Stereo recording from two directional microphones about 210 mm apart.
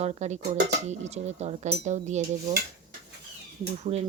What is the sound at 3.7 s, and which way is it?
Stir, 30° right (ahead or behind).